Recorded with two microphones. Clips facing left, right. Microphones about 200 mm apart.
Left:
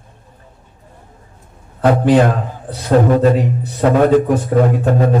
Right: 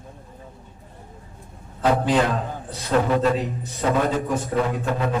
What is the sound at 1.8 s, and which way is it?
Speech, 55° left (ahead or behind).